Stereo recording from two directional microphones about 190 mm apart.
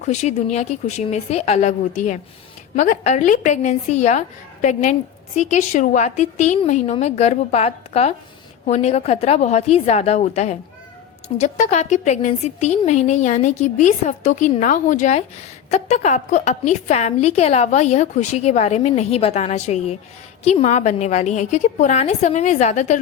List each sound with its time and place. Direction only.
0.0 s a woman's voice: 35° left (ahead or behind)